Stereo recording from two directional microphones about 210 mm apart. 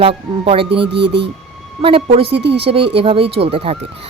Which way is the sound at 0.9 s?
55° right (ahead or behind).